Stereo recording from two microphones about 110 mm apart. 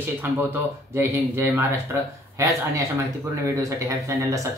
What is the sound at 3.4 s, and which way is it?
Speech, 30° right (ahead or behind).